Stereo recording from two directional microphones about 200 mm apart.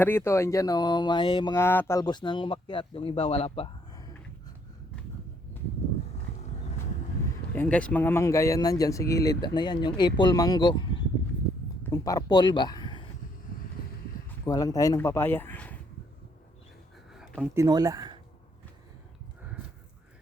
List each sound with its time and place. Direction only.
0.0 s speech: 10° left (ahead or behind); by 4.0 s 25° left (ahead or behind)
7.5 s a man's voice: 10° left (ahead or behind)
14.4 s a man's voice: 20° left (ahead or behind)
17.2 s a sound: centre (ahead or behind)
17.5 s speech: 15° right (ahead or behind)